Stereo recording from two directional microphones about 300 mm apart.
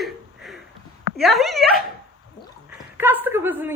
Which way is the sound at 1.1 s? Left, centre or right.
Centre.